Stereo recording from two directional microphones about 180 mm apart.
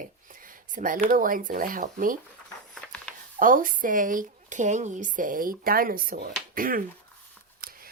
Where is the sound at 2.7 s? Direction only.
5° left (ahead or behind).